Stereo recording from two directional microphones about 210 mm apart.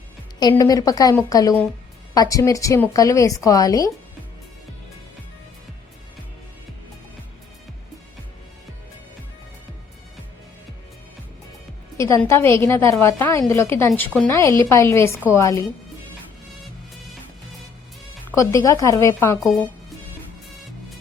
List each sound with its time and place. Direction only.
0.3 s a woman's voice: 15° left (ahead or behind)
11.9 s a woman's voice: 15° left (ahead or behind)
18.3 s a woman's voice: 15° left (ahead or behind)